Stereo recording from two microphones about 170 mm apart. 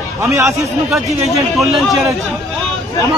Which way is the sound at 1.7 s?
Centre (ahead or behind).